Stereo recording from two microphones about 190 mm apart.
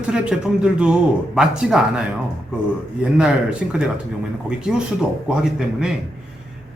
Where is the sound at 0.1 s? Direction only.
5° right (ahead or behind).